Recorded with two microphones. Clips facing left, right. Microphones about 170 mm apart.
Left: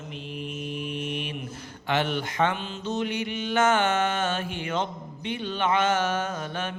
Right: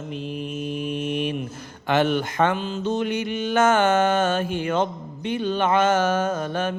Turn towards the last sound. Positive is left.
turn(degrees=-40)  # may be behind; listen again after turning